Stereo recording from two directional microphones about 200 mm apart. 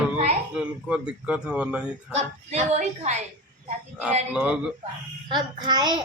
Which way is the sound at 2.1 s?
35° right (ahead or behind).